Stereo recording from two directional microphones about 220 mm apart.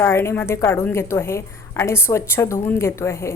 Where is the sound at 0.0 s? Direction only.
10° left (ahead or behind).